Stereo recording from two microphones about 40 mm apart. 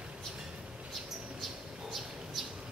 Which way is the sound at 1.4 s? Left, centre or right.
Centre.